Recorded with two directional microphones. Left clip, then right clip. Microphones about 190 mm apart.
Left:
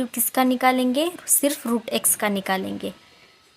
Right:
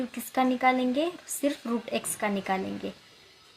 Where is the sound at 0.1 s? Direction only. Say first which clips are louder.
Left 4 dB; 40° left (ahead or behind).